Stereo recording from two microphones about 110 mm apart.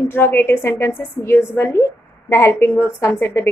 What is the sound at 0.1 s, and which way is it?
A woman's voice, 20° left (ahead or behind).